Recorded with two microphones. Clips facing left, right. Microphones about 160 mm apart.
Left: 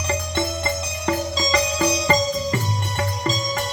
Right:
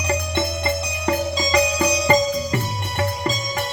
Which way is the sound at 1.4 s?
55° right (ahead or behind).